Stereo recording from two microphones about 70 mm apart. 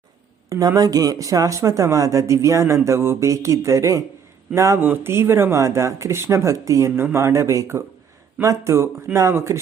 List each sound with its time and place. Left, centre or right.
0.5 s speech: right
0.8 s speech: right
4.8 s speech: right
6.9 s speech: right